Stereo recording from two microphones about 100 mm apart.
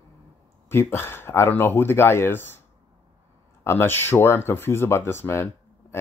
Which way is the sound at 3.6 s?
25° left (ahead or behind).